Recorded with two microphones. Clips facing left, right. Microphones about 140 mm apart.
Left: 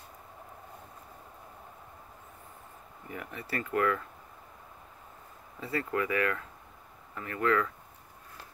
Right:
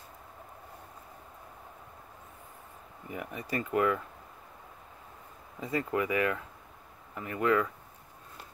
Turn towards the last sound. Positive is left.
turn(degrees=-20)  # may be behind; listen again after turning